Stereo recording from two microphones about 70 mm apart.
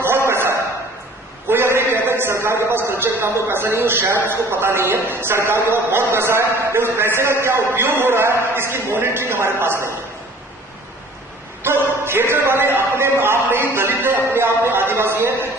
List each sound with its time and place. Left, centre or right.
0.0 s a sound: right
1.5 s a man's voice: right
11.6 s a man's voice: right